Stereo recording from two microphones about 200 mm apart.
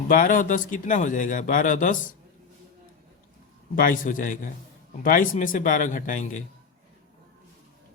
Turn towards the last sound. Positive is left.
turn(degrees=40)  # may be behind; listen again after turning